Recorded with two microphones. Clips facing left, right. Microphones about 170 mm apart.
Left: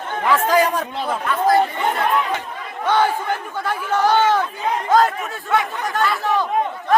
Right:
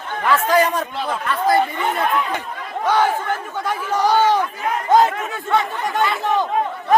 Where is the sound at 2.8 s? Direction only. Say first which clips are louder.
Even; centre (ahead or behind); by 6.4 s 20° right (ahead or behind).